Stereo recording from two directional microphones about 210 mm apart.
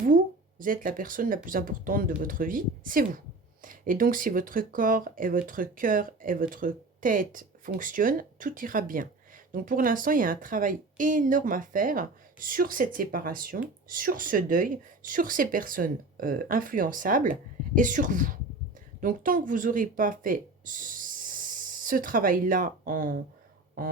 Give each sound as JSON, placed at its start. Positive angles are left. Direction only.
{"t": 0.6, "sound": "a woman's voice", "side_deg": -40}